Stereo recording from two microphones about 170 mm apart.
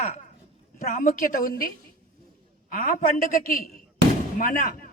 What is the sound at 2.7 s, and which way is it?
A man's voice, 55° left (ahead or behind).